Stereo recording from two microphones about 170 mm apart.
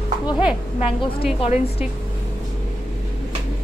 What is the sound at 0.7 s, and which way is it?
A woman's voice, 35° left (ahead or behind).